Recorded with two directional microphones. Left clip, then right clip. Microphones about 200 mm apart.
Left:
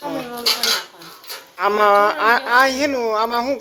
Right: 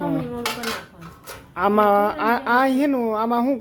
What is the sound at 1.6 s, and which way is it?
A man's voice, centre (ahead or behind).